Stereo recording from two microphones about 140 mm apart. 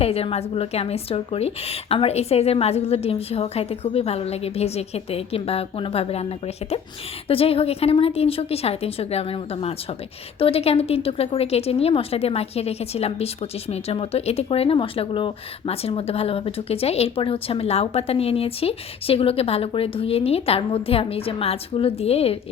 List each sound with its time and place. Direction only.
0.0 s a woman's voice: 45° left (ahead or behind)